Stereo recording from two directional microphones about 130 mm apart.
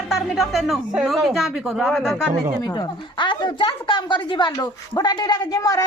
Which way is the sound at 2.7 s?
40° left (ahead or behind).